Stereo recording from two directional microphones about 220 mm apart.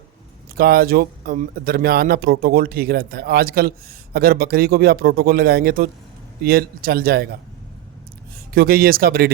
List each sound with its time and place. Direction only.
0.5 s speech: 45° right (ahead or behind)
8.5 s speech: 40° right (ahead or behind)